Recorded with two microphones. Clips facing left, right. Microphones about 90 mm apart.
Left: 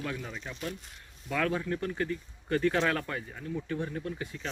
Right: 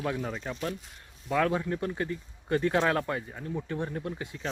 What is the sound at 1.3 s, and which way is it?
Speech, 25° right (ahead or behind).